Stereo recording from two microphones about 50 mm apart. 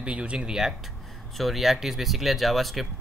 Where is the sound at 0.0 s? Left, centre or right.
Right.